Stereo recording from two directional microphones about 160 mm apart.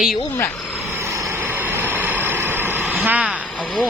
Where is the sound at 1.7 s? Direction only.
10° right (ahead or behind).